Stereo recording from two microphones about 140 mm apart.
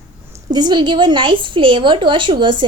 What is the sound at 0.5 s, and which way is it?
A woman's voice, 30° right (ahead or behind).